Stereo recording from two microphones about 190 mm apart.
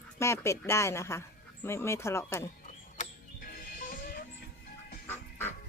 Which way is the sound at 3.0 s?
45° left (ahead or behind).